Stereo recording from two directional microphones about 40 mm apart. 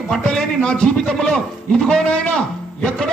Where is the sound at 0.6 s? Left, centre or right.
Left.